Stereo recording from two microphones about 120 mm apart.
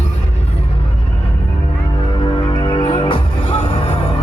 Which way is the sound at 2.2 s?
45° left (ahead or behind).